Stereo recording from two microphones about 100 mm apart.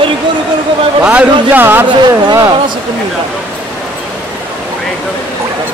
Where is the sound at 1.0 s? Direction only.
15° right (ahead or behind).